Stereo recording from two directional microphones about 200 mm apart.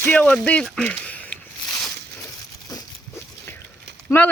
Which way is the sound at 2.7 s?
20° left (ahead or behind).